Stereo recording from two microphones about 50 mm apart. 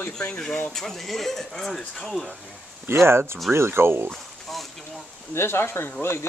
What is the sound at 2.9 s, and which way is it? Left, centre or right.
Speech, right.